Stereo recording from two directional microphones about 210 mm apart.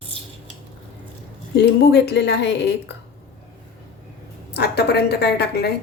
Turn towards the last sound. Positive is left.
turn(degrees=50)  # may be behind; listen again after turning